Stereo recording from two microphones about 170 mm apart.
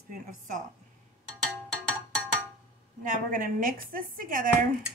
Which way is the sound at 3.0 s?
50° right (ahead or behind).